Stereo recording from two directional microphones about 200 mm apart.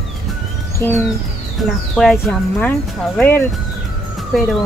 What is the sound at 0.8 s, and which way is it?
Speech, 10° left (ahead or behind).